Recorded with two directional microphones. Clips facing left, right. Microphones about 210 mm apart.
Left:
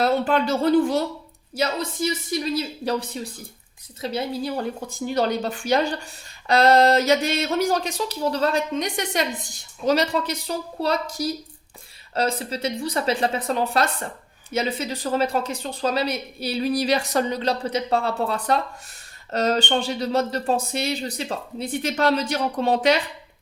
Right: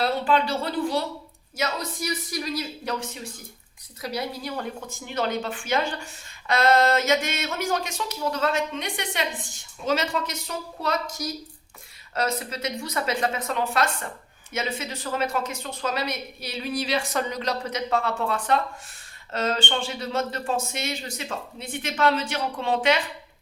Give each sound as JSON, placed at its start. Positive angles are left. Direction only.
{"t": 0.0, "sound": "speech", "side_deg": 45}
{"t": 1.5, "sound": "a woman's voice", "side_deg": 30}